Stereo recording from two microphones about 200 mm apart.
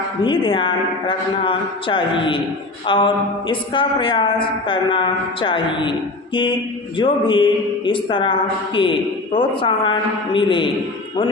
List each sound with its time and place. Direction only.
0.3 s a man's voice: 25° left (ahead or behind)
6.9 s a man's voice: 25° left (ahead or behind)